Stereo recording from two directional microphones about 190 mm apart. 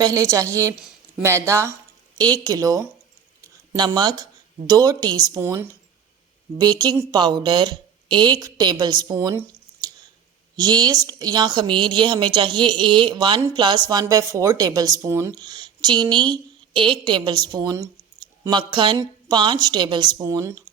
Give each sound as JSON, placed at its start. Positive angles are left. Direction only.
{"t": 0.0, "sound": "a woman's voice", "side_deg": -15}
{"t": 10.6, "sound": "a woman's voice", "side_deg": -20}